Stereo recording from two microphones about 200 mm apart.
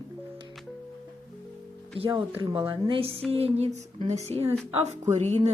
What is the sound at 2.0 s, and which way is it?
Speech, 25° right (ahead or behind).